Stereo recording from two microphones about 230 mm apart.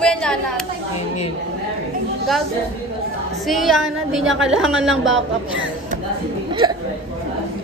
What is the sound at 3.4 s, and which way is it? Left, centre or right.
A woman's voice, centre.